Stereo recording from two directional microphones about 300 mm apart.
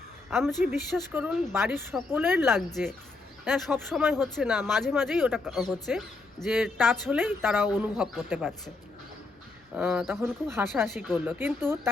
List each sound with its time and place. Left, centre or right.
0.3 s a woman's voice: centre
9.7 s speech: centre